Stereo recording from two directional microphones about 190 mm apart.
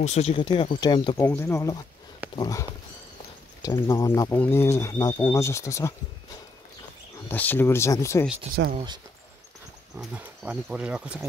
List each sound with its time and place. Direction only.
0.0 s speech: 35° left (ahead or behind); by 2.6 s 20° left (ahead or behind)
3.6 s speech: 15° left (ahead or behind)
7.2 s speech: 10° left (ahead or behind)
8.7 s speech: 25° right (ahead or behind)
9.9 s speech: 10° right (ahead or behind)